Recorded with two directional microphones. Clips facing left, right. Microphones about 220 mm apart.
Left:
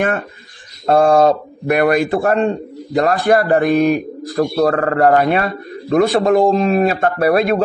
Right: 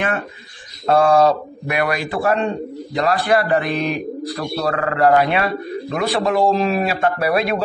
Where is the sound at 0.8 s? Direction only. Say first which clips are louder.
Left 2 dB; 45° left (ahead or behind).